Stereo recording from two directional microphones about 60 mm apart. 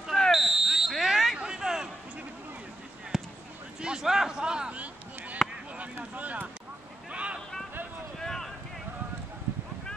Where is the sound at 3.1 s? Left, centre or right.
Centre.